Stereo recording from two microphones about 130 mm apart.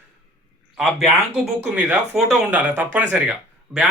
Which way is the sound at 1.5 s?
10° right (ahead or behind).